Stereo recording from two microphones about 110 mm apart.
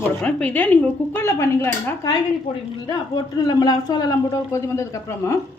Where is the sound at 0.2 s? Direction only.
10° left (ahead or behind).